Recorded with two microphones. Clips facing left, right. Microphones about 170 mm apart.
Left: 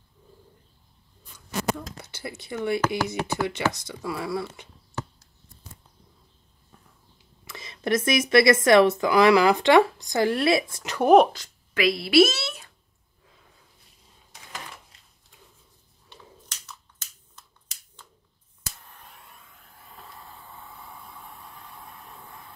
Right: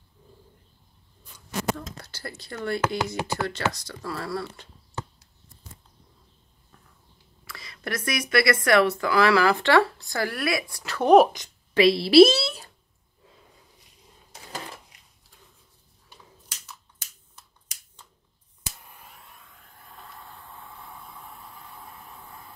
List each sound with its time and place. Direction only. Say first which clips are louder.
2.3 s speech: left 3 dB; 20° left (ahead or behind)
7.4 s speech: left 7 dB; 20° left (ahead or behind)
11.4 s a woman's voice: right 2 dB; 20° right (ahead or behind)
11.7 s a woman's voice: right 4 dB; 30° right (ahead or behind)
16.6 s a sound: even; 10° right (ahead or behind)